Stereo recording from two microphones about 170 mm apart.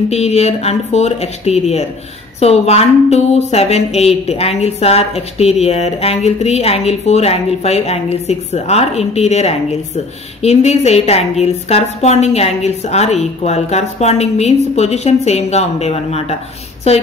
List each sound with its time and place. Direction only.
0.1 s speech: 40° left (ahead or behind)